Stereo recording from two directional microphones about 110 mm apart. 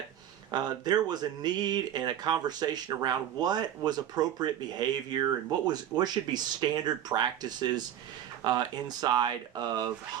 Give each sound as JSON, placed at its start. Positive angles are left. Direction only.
{"t": 0.5, "sound": "speech", "side_deg": -40}
{"t": 8.4, "sound": "speech", "side_deg": -35}